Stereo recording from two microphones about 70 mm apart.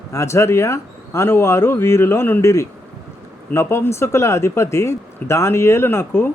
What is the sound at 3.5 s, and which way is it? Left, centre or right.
Speech, left.